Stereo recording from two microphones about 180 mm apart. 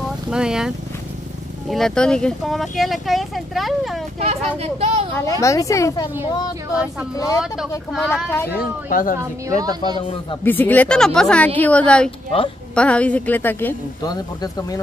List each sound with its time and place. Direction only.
0.3 s speech: 5° right (ahead or behind)
4.2 s speech: 35° right (ahead or behind)
5.1 s speech: 15° left (ahead or behind)
6.7 s speech: 5° right (ahead or behind)
7.2 s speech: 20° left (ahead or behind)
8.5 s speech: 50° left (ahead or behind)
9.2 s a woman's voice: 20° right (ahead or behind)
10.4 s speech: 10° left (ahead or behind)
14.0 s speech: 20° left (ahead or behind)